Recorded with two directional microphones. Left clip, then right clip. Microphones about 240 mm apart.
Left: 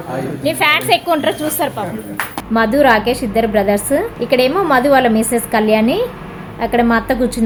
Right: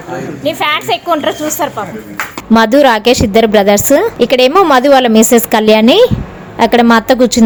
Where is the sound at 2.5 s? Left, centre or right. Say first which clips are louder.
Right 4 dB; right.